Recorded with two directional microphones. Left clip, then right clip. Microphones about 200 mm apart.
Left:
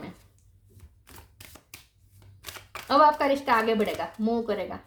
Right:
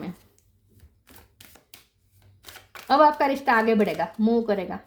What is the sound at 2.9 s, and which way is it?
A woman's voice, 40° right (ahead or behind).